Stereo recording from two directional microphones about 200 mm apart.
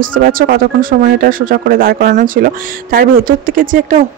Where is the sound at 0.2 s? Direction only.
45° right (ahead or behind).